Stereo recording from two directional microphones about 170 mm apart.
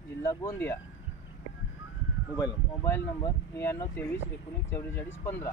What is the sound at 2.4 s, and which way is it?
Speech, 20° left (ahead or behind).